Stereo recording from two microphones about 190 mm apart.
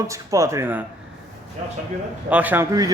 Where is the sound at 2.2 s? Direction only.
10° right (ahead or behind).